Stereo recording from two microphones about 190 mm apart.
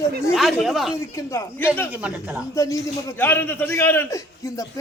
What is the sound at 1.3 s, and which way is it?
A man's voice, 10° left (ahead or behind).